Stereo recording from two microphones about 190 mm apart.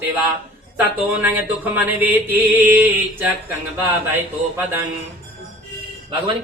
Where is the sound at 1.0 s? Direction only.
10° right (ahead or behind).